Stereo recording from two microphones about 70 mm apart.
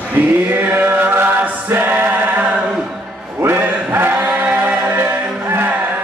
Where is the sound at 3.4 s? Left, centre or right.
Right.